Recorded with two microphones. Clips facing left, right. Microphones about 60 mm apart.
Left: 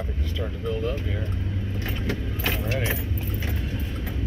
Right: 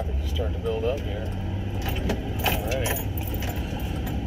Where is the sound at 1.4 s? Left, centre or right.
Centre.